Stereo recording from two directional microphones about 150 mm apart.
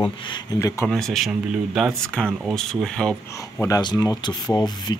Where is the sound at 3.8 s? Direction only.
25° left (ahead or behind).